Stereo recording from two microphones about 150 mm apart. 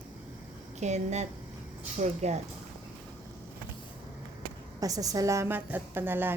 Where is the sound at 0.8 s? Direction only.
50° right (ahead or behind).